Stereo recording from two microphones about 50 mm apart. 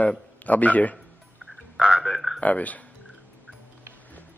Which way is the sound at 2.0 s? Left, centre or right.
Centre.